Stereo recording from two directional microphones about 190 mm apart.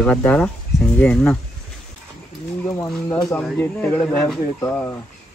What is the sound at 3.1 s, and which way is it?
Speech, 20° left (ahead or behind).